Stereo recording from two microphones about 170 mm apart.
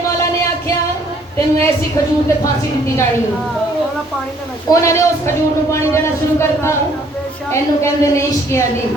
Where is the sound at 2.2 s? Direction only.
15° left (ahead or behind).